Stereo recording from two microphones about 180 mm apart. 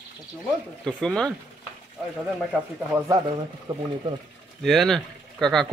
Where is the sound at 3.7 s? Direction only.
25° right (ahead or behind).